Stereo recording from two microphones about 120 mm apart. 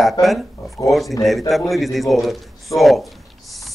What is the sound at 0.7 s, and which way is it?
Speech, 25° left (ahead or behind).